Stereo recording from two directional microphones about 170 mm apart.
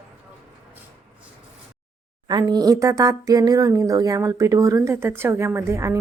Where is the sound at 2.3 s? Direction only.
25° right (ahead or behind).